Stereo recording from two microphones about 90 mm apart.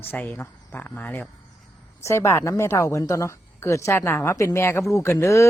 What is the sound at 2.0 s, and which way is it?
A woman's voice, 30° left (ahead or behind).